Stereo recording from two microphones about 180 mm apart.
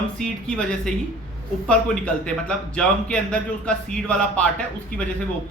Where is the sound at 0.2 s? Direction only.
5° left (ahead or behind).